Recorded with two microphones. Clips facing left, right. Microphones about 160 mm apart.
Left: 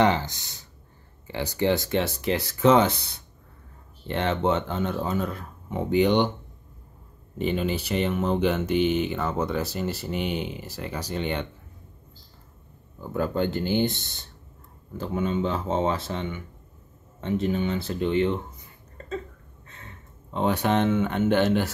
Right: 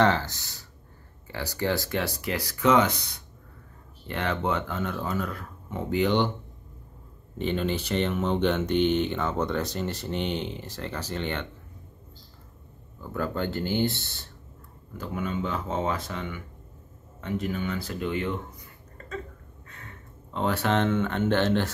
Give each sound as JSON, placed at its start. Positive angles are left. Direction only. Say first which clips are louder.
{"t": 0.0, "sound": "speech", "louder": "left 1 dB", "side_deg": 15}
{"t": 7.3, "sound": "speech", "louder": "left 1 dB", "side_deg": 10}
{"t": 13.0, "sound": "speech", "louder": "left 4 dB", "side_deg": 20}
{"t": 20.3, "sound": "speech", "louder": "left 2 dB", "side_deg": 20}